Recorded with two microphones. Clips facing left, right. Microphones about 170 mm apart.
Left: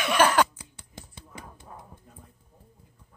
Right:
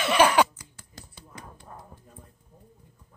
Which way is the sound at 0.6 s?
20° left (ahead or behind).